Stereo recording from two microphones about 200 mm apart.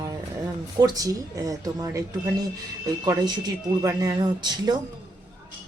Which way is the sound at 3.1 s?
20° right (ahead or behind).